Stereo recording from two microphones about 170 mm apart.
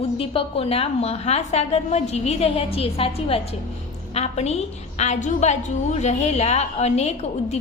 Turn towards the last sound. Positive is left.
turn(degrees=40)  # may be behind; listen again after turning